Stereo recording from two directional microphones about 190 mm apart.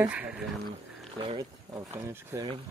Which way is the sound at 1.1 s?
20° right (ahead or behind).